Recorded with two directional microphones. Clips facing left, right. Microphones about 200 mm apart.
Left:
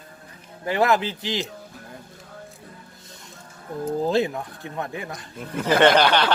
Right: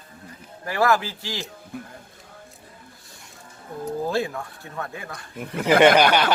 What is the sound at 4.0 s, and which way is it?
Speech, 20° left (ahead or behind).